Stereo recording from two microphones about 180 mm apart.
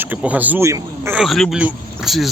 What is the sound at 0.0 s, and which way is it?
Speech, 10° right (ahead or behind).